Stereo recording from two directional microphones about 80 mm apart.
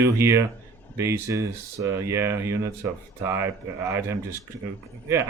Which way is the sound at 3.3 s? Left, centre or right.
Right.